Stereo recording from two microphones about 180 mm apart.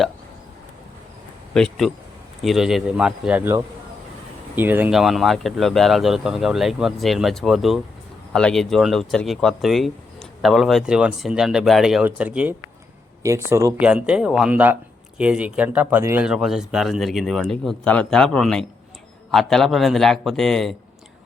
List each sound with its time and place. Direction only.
1.5 s speech: centre (ahead or behind); by 13.7 s 15° right (ahead or behind)
13.7 s speech: 5° right (ahead or behind)